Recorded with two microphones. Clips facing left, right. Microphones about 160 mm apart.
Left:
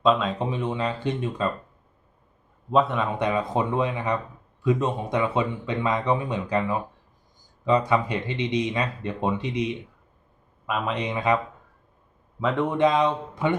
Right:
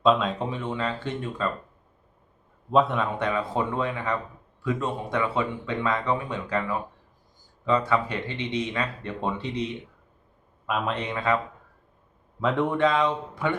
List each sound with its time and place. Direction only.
0.0 s a man's voice: centre (ahead or behind)
0.3 s speech: 20° left (ahead or behind)
2.7 s a man's voice: centre (ahead or behind)
3.2 s speech: 15° left (ahead or behind)
10.7 s a man's voice: centre (ahead or behind)
10.9 s speech: 15° left (ahead or behind)
12.4 s a man's voice: centre (ahead or behind)
12.7 s speech: 20° left (ahead or behind)